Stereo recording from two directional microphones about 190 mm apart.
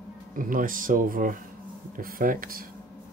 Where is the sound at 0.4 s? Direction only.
45° right (ahead or behind).